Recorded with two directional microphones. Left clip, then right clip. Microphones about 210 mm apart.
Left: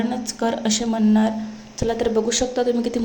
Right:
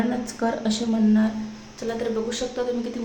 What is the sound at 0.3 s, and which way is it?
A woman's voice, 30° left (ahead or behind).